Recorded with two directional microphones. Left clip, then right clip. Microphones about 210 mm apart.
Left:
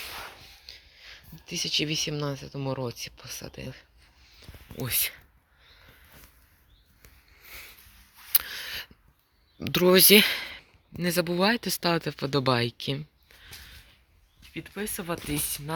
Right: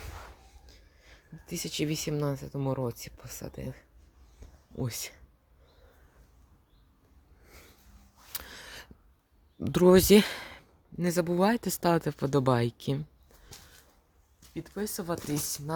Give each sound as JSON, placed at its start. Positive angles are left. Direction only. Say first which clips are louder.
{"t": 0.1, "sound": "a sound", "louder": "left 8 dB", "side_deg": 25}
{"t": 0.7, "sound": "speech", "louder": "left 13 dB", "side_deg": -10}
{"t": 4.9, "sound": "speech", "louder": "left 9 dB", "side_deg": -10}
{"t": 8.3, "sound": "a sound", "louder": "left 10 dB", "side_deg": -10}
{"t": 9.6, "sound": "speech", "louder": "left 2 dB", "side_deg": -25}
{"t": 14.5, "sound": "speech", "louder": "left 1 dB", "side_deg": 10}